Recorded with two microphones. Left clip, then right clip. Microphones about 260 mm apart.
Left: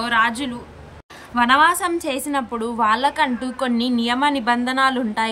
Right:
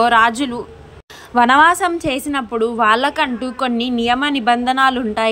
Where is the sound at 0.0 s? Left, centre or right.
Centre.